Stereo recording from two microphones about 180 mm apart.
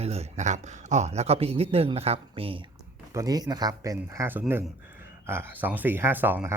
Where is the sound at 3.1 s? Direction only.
20° right (ahead or behind).